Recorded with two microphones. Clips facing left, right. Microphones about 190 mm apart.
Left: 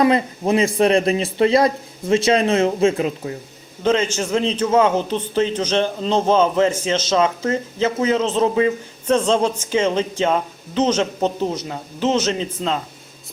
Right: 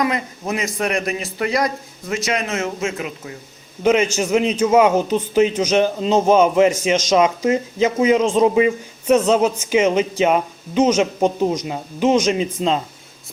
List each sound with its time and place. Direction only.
0.0 s speech: 30° left (ahead or behind)
3.8 s speech: 10° right (ahead or behind)